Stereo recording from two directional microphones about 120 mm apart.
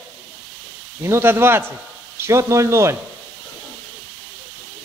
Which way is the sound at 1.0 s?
20° right (ahead or behind).